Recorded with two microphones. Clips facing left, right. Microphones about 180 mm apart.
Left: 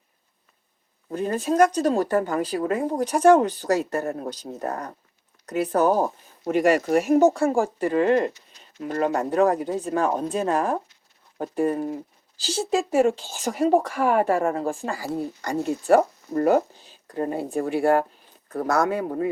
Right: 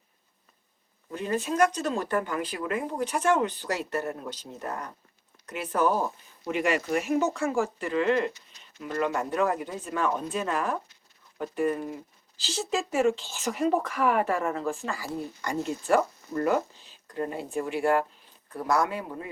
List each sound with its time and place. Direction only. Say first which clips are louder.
1.1 s speech: left 6 dB; 40° left (ahead or behind)
7.3 s speech: left 5 dB; 35° left (ahead or behind)
7.9 s speech: left 6 dB; 45° left (ahead or behind)
18.5 s speech: left 4 dB; 45° left (ahead or behind)